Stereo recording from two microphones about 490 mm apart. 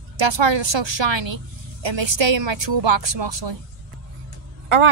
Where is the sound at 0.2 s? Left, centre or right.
Right.